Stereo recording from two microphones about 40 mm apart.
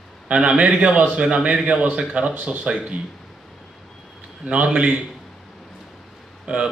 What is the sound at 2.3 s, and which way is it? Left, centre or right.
Speech, right.